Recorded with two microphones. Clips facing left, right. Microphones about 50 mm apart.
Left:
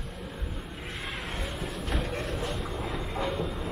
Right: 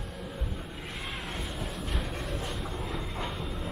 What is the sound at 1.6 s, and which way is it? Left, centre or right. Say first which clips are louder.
Music: left 3 dB; centre.